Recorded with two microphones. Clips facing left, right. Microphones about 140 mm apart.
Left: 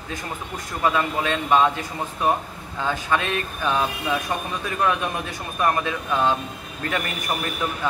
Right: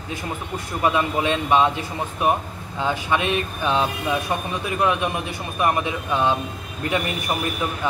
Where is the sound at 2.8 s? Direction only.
15° right (ahead or behind).